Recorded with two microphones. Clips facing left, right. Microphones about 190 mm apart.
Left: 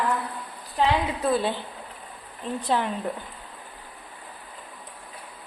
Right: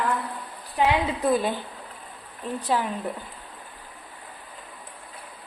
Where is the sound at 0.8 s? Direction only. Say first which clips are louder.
Right 1 dB; 10° right (ahead or behind).